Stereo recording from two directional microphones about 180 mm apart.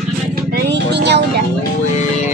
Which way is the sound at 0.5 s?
70° right (ahead or behind).